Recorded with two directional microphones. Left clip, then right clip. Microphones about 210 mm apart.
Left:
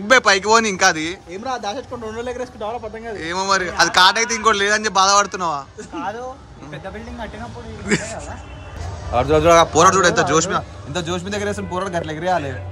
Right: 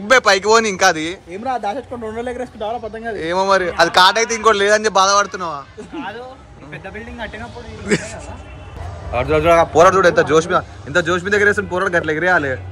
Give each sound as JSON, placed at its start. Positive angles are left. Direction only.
{"t": 0.0, "sound": "speech", "side_deg": 10}
{"t": 1.3, "sound": "speech", "side_deg": -45}
{"t": 3.2, "sound": "a man's voice", "side_deg": 5}
{"t": 7.8, "sound": "a man's voice", "side_deg": 5}
{"t": 9.1, "sound": "speech", "side_deg": 15}
{"t": 9.6, "sound": "a man's voice", "side_deg": 5}